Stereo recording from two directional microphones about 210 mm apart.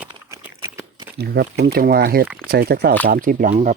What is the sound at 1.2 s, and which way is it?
Speech, 50° right (ahead or behind).